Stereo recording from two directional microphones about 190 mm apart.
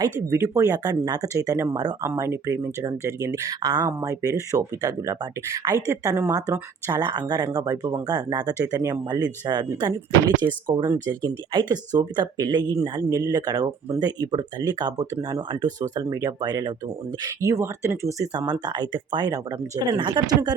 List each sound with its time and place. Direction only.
0.0 s speech: 15° right (ahead or behind)